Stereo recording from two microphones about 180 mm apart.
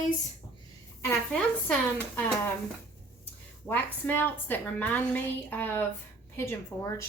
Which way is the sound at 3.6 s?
10° left (ahead or behind).